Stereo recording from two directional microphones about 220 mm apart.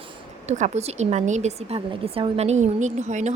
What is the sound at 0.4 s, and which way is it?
Speech, 30° right (ahead or behind).